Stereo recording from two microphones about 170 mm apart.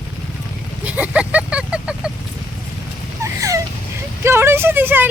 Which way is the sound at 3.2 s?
20° right (ahead or behind).